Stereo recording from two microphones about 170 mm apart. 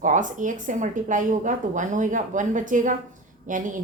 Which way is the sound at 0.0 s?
50° right (ahead or behind).